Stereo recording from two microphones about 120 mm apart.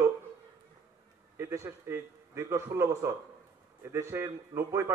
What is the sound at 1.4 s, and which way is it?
A man's voice, 20° right (ahead or behind).